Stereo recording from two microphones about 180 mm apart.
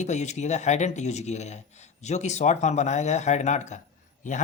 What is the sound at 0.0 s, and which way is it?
Speech, 40° left (ahead or behind).